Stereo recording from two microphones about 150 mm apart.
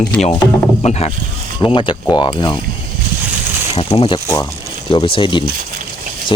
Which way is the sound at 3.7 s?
35° left (ahead or behind).